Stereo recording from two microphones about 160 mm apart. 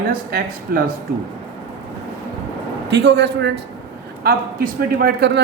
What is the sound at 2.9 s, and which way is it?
Speech, 90° right.